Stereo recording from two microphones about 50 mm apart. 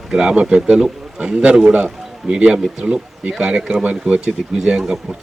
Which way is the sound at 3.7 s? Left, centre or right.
Right.